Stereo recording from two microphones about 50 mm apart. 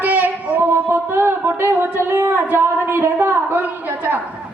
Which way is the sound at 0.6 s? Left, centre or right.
Right.